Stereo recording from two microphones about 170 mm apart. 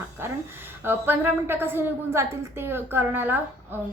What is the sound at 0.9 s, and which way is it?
A woman's voice, 10° right (ahead or behind).